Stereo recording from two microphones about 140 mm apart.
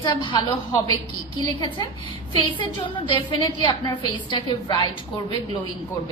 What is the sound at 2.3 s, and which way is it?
A woman's voice, 35° left (ahead or behind).